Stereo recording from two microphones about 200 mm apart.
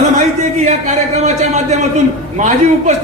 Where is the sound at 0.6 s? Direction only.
35° right (ahead or behind).